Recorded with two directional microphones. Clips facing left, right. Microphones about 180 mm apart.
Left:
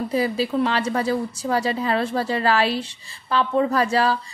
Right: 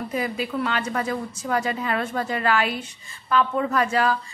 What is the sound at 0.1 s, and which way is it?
A woman's voice, 30° left (ahead or behind).